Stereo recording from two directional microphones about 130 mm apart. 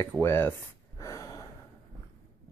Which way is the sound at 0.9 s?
25° left (ahead or behind).